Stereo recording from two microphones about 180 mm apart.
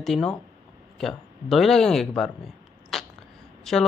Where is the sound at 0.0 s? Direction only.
Centre (ahead or behind).